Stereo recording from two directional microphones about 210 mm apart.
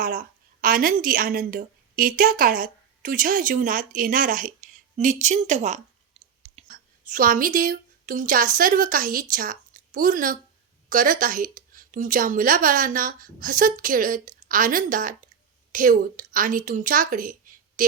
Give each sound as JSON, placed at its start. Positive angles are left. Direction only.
{"t": 0.0, "sound": "a woman's voice", "side_deg": -40}